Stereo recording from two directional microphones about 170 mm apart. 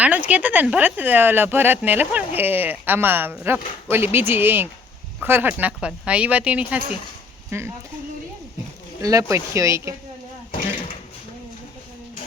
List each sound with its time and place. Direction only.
0.0 s speech: 10° right (ahead or behind)
9.0 s speech: 20° right (ahead or behind)